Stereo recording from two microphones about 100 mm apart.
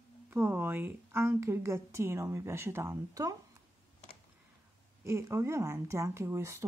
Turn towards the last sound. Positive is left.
turn(degrees=-30)  # may be behind; listen again after turning